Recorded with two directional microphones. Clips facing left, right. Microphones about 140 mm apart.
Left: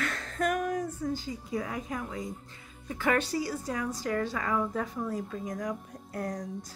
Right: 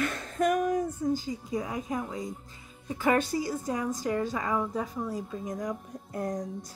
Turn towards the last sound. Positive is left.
turn(degrees=-20)  # may be behind; listen again after turning